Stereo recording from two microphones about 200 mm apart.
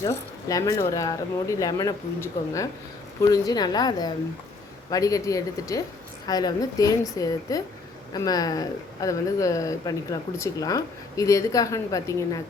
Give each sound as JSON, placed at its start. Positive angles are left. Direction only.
{"t": 0.0, "sound": "a woman's voice", "side_deg": 15}